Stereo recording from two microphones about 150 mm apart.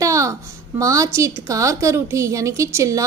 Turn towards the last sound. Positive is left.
turn(degrees=-20)  # may be behind; listen again after turning